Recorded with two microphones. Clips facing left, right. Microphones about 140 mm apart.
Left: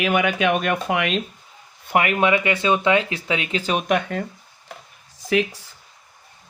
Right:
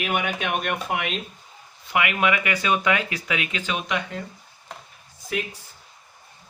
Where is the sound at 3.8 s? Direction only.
55° left (ahead or behind).